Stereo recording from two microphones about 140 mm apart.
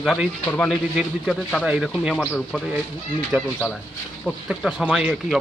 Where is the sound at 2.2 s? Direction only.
15° left (ahead or behind).